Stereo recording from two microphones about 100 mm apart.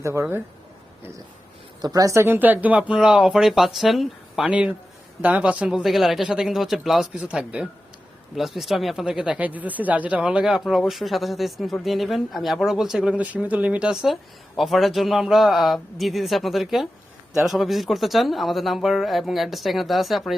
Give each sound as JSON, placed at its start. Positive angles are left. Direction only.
{"t": 0.0, "sound": "speech", "side_deg": -30}
{"t": 1.8, "sound": "speech", "side_deg": -35}
{"t": 2.2, "sound": "speech", "side_deg": -20}
{"t": 4.4, "sound": "speech", "side_deg": -10}